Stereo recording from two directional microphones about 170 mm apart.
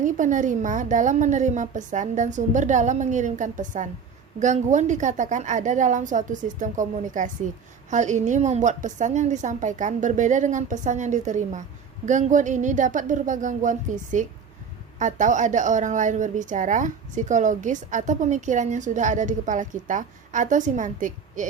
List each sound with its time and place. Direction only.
0.0 s a woman's voice: 50° right (ahead or behind)